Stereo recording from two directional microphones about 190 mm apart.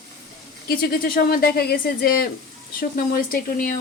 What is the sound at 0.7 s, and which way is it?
Speech, 50° left (ahead or behind).